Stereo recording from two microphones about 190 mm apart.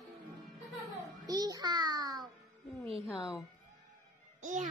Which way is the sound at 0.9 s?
20° right (ahead or behind).